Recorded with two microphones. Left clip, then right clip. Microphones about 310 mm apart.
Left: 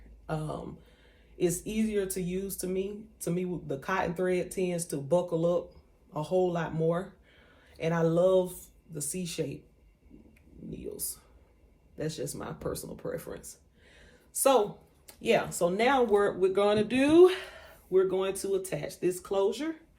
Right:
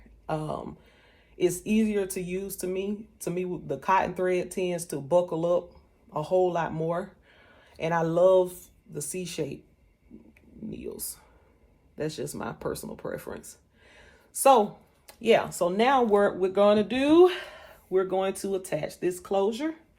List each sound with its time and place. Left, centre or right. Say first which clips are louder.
0.3 s speech: right 5 dB; centre
10.7 s whispering: right 2 dB; right
11.9 s speech: right 3 dB; right
15.0 s speech: right 4 dB; right